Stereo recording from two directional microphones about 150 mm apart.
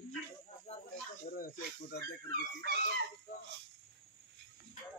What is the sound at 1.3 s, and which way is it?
Speech, 70° left (ahead or behind).